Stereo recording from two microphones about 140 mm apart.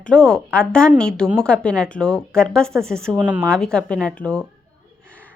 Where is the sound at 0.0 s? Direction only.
5° left (ahead or behind).